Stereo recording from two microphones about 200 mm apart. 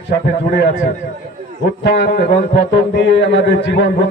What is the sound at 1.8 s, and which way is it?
A man's voice, 60° left (ahead or behind).